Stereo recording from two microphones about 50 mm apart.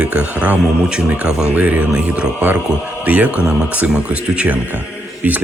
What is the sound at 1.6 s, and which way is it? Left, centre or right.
Speech, right.